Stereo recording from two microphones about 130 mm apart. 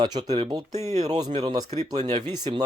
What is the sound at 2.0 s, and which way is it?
Speech, 50° right (ahead or behind).